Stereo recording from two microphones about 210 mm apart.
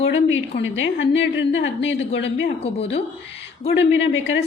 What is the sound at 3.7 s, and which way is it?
Speech, 60° left (ahead or behind).